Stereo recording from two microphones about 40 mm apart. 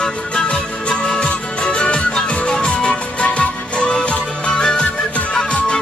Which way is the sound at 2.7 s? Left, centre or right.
Left.